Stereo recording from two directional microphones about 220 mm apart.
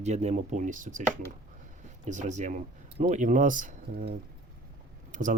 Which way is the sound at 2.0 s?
35° right (ahead or behind).